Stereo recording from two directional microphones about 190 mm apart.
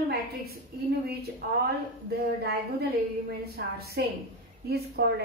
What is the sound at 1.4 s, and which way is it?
A woman's voice, 50° right (ahead or behind).